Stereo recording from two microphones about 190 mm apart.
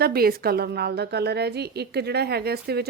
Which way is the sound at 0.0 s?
55° right (ahead or behind).